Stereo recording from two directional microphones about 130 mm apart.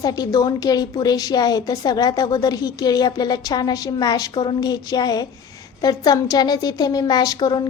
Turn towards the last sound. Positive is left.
turn(degrees=30)  # may be behind; listen again after turning